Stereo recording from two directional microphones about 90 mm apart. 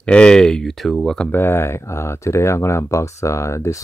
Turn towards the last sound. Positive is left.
turn(degrees=35)  # may be behind; listen again after turning